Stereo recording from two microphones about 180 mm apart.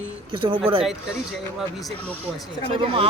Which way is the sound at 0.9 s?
Centre (ahead or behind).